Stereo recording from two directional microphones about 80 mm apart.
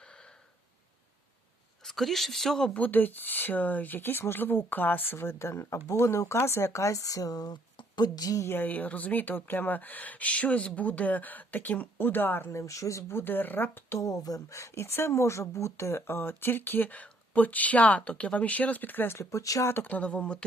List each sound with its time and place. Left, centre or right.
0.0 s a sound: centre
1.8 s speech: centre
2.8 s speech: left
7.8 s speech: left
8.4 s speech: left
14.0 s speech: left
19.7 s speech: left